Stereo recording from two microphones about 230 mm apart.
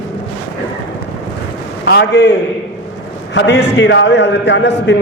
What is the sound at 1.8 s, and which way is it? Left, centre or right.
Speech, left.